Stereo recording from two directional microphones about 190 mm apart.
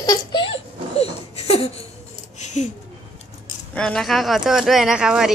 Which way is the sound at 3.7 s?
5° left (ahead or behind).